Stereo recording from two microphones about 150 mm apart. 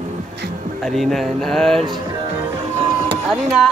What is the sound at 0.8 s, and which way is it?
Speech, centre (ahead or behind).